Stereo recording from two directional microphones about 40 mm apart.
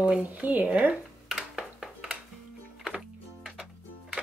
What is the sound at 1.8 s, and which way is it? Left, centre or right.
Music, centre.